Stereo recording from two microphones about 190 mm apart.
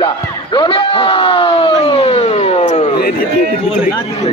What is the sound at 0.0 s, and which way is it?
Basketball bounce, 25° left (ahead or behind).